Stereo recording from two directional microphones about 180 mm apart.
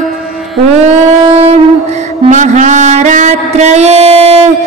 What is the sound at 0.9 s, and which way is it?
Music, 35° right (ahead or behind).